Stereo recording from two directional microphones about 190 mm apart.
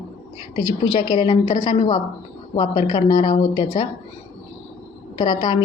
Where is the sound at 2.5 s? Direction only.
20° left (ahead or behind).